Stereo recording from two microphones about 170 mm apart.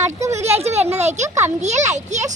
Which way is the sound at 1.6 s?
45° right (ahead or behind).